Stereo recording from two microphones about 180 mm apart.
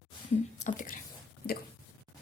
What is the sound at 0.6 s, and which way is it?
Speech, 45° left (ahead or behind).